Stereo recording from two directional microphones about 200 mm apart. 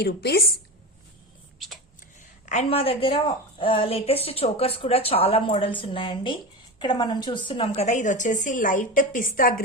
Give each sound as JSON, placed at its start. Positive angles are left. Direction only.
{"t": 0.0, "sound": "a woman's voice", "side_deg": 55}
{"t": 1.5, "sound": "whispering", "side_deg": 0}
{"t": 2.5, "sound": "a woman's voice", "side_deg": 30}